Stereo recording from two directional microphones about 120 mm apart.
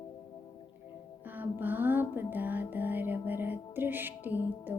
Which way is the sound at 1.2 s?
15° right (ahead or behind).